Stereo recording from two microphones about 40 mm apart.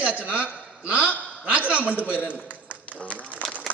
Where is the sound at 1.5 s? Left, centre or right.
Right.